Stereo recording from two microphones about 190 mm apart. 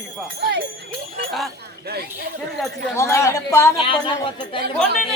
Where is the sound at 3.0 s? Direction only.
15° left (ahead or behind).